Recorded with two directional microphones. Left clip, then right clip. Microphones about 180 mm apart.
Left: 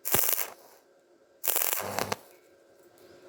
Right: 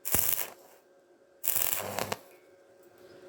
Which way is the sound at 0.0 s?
10° left (ahead or behind).